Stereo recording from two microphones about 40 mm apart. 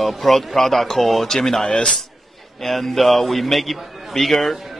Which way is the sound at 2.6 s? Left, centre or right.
Centre.